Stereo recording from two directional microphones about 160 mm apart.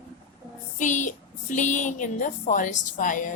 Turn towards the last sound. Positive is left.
turn(degrees=50)  # may be behind; listen again after turning